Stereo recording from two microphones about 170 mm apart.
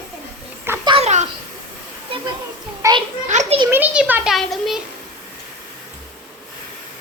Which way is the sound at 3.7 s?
10° right (ahead or behind).